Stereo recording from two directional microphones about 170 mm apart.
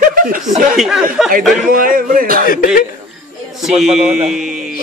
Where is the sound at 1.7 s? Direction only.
55° right (ahead or behind).